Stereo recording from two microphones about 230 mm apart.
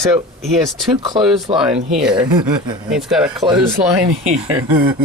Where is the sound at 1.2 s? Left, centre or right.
Centre.